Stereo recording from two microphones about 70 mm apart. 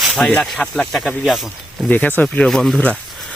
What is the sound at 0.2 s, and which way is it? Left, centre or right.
Speech, centre.